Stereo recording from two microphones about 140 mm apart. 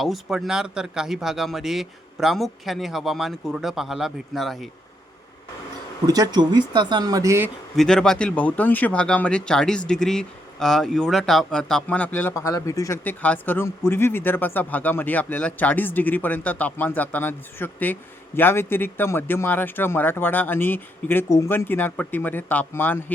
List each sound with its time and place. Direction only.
0.0 s speech: centre (ahead or behind)
6.1 s speech: 30° right (ahead or behind)
7.8 s speech: 5° left (ahead or behind)
12.3 s speech: 20° left (ahead or behind)